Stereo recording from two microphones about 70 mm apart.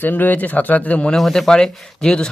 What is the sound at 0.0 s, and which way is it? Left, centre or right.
A man's voice, left.